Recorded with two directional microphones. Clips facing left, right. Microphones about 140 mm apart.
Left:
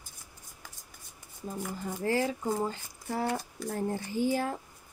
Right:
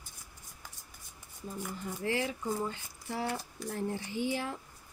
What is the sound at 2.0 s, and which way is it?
Speech, 40° left (ahead or behind).